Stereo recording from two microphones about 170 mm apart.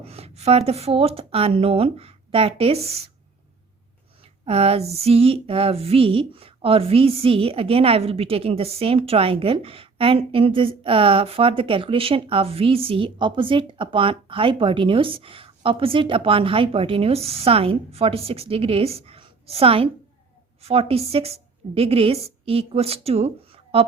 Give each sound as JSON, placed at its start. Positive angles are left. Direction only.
{"t": 0.0, "sound": "speech", "side_deg": -35}
{"t": 4.2, "sound": "a woman's voice", "side_deg": -35}